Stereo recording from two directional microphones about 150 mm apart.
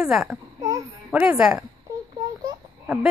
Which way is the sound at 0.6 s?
25° right (ahead or behind).